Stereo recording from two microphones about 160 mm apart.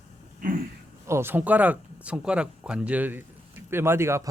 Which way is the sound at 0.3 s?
60° right (ahead or behind).